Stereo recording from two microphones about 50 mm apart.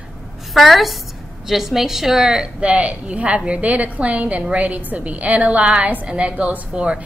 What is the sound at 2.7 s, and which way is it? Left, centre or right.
A woman's voice, right.